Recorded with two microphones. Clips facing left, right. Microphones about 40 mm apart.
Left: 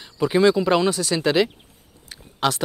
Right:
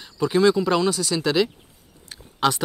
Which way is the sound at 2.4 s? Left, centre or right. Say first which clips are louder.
Right 1 dB; centre.